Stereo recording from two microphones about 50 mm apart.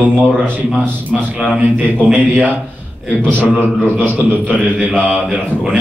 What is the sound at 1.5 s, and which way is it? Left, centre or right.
A man's voice, right.